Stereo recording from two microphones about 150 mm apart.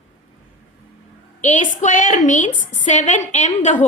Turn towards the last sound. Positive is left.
turn(degrees=50)  # may be behind; listen again after turning